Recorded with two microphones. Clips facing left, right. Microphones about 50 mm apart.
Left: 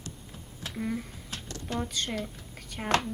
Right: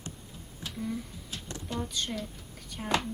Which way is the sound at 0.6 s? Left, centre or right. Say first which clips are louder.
Left 2 dB; left.